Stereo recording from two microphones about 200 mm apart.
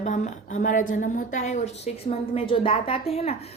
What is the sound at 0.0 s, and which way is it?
A woman's voice, 35° left (ahead or behind).